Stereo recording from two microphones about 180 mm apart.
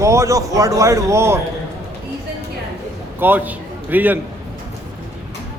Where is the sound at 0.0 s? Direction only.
15° right (ahead or behind).